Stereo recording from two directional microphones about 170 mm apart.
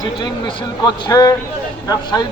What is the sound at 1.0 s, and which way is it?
A man's voice, 25° left (ahead or behind).